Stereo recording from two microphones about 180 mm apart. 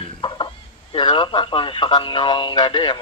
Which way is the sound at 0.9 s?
30° left (ahead or behind).